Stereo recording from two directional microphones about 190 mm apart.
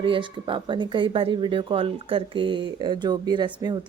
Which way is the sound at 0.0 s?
25° right (ahead or behind).